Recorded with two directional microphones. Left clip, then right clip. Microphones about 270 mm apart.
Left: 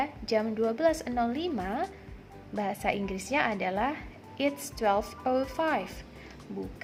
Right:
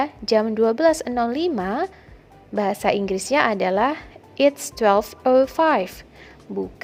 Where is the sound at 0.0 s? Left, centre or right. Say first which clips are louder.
Right 9 dB; right.